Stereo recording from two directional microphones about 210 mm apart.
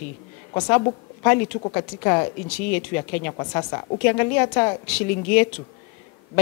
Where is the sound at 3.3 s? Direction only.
20° left (ahead or behind).